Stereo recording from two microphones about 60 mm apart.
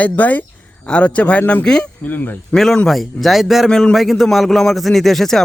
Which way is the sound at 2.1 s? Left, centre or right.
Left.